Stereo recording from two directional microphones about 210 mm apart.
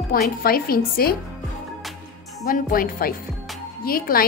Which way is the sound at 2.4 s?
45° left (ahead or behind).